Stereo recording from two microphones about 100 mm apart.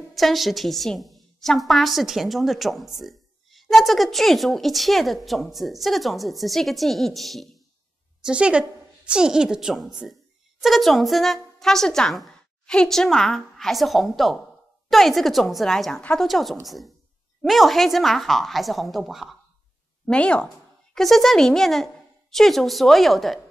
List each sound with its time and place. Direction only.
0.1 s a woman's voice: centre (ahead or behind)
8.3 s a woman's voice: 10° right (ahead or behind)
20.1 s a woman's voice: 10° left (ahead or behind)